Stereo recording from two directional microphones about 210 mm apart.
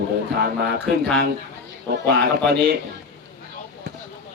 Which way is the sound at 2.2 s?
55° right (ahead or behind).